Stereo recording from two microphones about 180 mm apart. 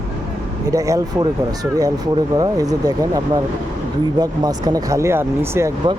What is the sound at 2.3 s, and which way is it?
Speech, 20° right (ahead or behind).